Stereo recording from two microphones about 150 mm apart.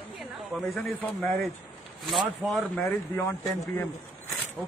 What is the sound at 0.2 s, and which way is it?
Speech, centre (ahead or behind).